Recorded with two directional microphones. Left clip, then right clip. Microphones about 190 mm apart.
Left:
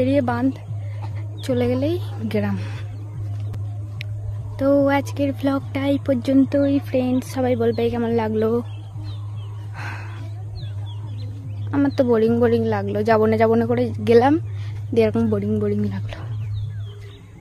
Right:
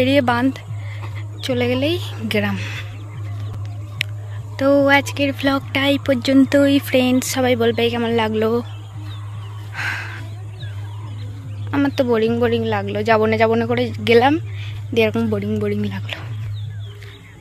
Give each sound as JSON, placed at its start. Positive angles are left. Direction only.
{"t": 0.0, "sound": "speech", "side_deg": 0}
{"t": 1.4, "sound": "speech", "side_deg": 15}
{"t": 4.6, "sound": "speech", "side_deg": 10}
{"t": 6.5, "sound": "speech", "side_deg": -5}
{"t": 9.8, "sound": "a sound", "side_deg": 5}
{"t": 11.7, "sound": "speech", "side_deg": 15}